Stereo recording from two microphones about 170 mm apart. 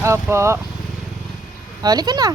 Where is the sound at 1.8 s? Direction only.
25° right (ahead or behind).